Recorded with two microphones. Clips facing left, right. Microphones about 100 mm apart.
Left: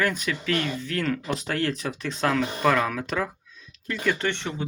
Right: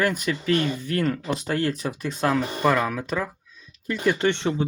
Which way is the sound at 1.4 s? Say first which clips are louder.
Right 3 dB; 15° right (ahead or behind).